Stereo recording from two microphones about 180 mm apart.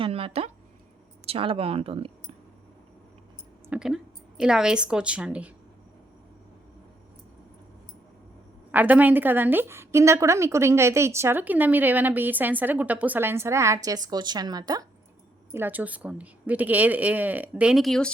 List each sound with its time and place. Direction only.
0.0 s a sound: 30° right (ahead or behind)
1.3 s speech: 30° right (ahead or behind)
3.7 s a woman's voice: 5° right (ahead or behind)
8.7 s a woman's voice: 10° right (ahead or behind)
15.5 s a woman's voice: 10° right (ahead or behind)